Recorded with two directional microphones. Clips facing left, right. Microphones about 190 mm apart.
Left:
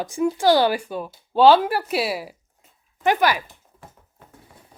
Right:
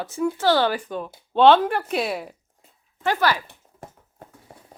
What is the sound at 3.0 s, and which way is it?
Speech, 15° left (ahead or behind).